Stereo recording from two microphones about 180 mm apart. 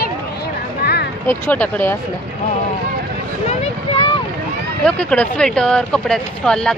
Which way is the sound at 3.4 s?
35° left (ahead or behind).